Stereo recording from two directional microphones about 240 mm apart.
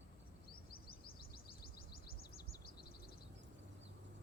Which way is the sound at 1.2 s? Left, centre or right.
Left.